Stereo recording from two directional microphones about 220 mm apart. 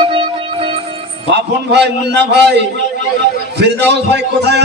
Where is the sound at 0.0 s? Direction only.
25° right (ahead or behind).